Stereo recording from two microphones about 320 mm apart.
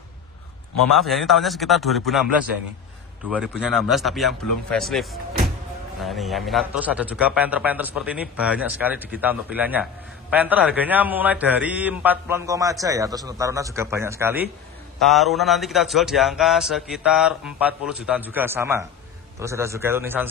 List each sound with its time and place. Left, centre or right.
0.9 s a man's voice: centre